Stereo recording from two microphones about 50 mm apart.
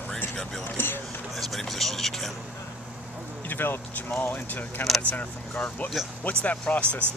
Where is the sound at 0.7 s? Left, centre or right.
Left.